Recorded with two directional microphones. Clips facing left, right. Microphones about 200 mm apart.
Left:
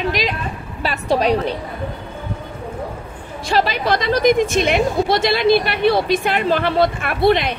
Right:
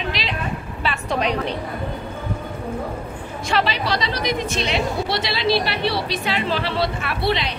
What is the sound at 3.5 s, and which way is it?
A woman's voice, 45° left (ahead or behind).